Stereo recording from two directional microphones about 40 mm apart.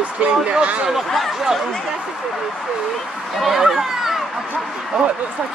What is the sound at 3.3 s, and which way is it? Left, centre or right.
Speech, centre.